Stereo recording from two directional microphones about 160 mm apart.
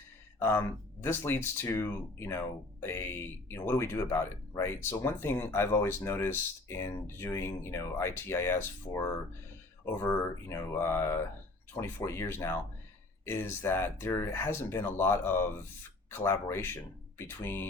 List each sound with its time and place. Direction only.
0.3 s speech: 15° left (ahead or behind)